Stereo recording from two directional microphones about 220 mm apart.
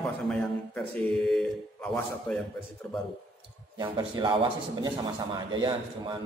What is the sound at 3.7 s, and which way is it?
A man's voice, 20° right (ahead or behind).